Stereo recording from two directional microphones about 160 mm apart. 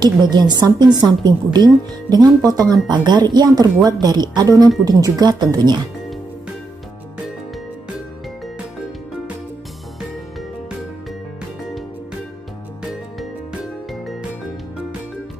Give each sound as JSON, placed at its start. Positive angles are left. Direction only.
{"t": 0.0, "sound": "a woman's voice", "side_deg": -25}